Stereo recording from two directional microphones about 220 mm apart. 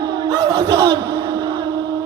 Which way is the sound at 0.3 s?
20° right (ahead or behind).